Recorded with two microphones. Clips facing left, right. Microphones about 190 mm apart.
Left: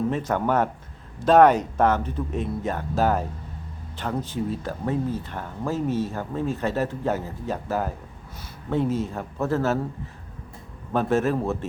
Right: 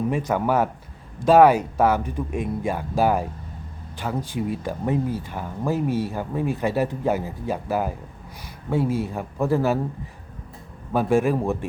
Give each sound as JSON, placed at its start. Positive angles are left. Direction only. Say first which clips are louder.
{"t": 0.1, "sound": "speech", "louder": "right 1 dB", "side_deg": -10}
{"t": 10.9, "sound": "speech", "louder": "right 2 dB", "side_deg": -10}